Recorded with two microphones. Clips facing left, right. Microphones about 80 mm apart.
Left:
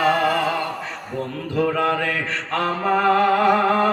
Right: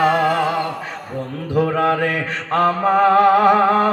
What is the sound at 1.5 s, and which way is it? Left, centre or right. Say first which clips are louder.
Mantra: right 3 dB; right.